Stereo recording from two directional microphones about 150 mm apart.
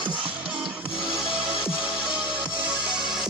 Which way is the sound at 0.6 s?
Centre (ahead or behind).